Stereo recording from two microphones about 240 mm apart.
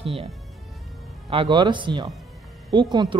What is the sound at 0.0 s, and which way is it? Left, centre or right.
Speech, right.